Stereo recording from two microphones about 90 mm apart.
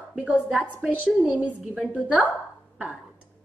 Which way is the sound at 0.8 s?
15° right (ahead or behind).